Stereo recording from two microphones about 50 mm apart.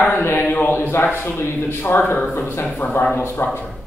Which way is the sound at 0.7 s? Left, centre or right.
Left.